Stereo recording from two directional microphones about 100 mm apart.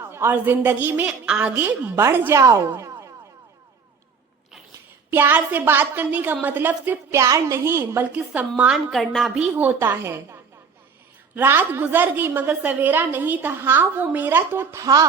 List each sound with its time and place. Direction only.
0.1 s a woman's voice: 20° right (ahead or behind)
2.0 s a woman's voice: 25° right (ahead or behind)
5.1 s a woman's voice: 20° right (ahead or behind)
7.1 s a woman's voice: 30° right (ahead or behind); by 8.7 s 15° right (ahead or behind)
8.7 s a woman's voice: centre (ahead or behind)
9.5 s a woman's voice: 15° right (ahead or behind)
11.3 s a woman's voice: 20° right (ahead or behind); by 15.0 s 35° right (ahead or behind)